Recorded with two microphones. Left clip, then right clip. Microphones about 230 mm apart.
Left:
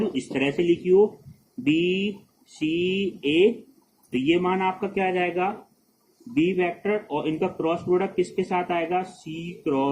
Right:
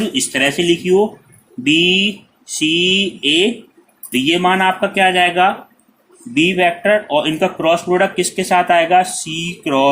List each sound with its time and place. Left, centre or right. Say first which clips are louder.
0.1 s speech: right 10 dB; right